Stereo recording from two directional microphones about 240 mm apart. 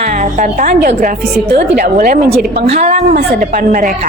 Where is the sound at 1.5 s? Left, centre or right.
Right.